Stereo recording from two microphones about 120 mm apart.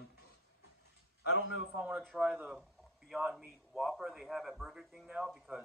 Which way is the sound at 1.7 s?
10° right (ahead or behind).